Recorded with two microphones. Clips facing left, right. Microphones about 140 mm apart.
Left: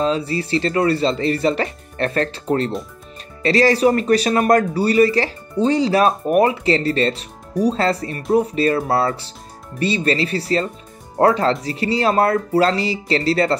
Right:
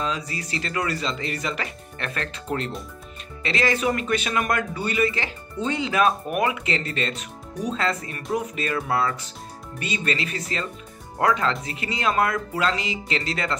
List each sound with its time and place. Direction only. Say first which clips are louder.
0.0 s speech: left 9 dB; 30° left (ahead or behind)